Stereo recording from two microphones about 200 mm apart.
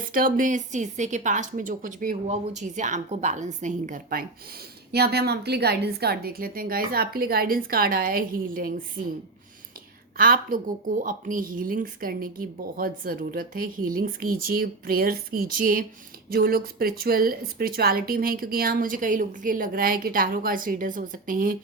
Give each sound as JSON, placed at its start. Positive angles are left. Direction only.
{"t": 0.1, "sound": "a woman's voice", "side_deg": -45}
{"t": 4.9, "sound": "a woman's voice", "side_deg": -55}
{"t": 10.2, "sound": "a woman's voice", "side_deg": -45}